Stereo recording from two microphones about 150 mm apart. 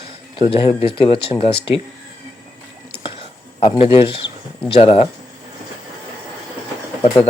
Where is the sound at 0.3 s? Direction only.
35° left (ahead or behind).